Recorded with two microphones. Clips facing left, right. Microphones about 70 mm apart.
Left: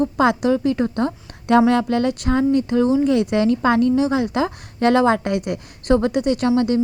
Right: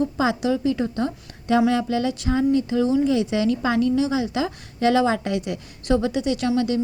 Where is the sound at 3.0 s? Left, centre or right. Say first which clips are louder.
Left 3 dB; left.